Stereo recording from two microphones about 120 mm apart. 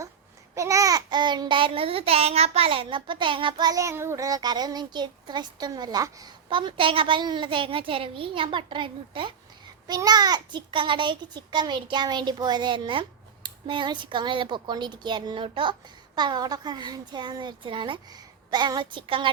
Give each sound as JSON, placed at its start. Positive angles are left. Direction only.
{"t": 0.5, "sound": "child singing", "side_deg": -25}
{"t": 3.7, "sound": "a child's voice", "side_deg": -25}
{"t": 6.5, "sound": "child singing", "side_deg": -45}
{"t": 9.8, "sound": "a child's voice", "side_deg": -35}
{"t": 15.4, "sound": "child singing", "side_deg": -50}
{"t": 16.1, "sound": "a child's voice", "side_deg": -35}